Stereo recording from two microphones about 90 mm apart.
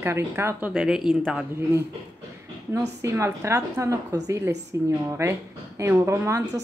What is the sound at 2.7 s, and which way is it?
A woman's voice, 30° right (ahead or behind).